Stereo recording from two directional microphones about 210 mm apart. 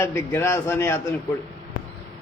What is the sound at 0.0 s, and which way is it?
Speech, 10° left (ahead or behind).